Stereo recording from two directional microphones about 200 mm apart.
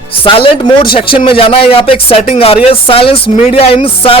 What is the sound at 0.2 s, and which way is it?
Speech, 25° left (ahead or behind).